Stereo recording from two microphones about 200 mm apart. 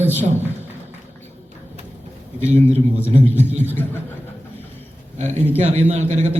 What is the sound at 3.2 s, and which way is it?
Speech, 10° left (ahead or behind).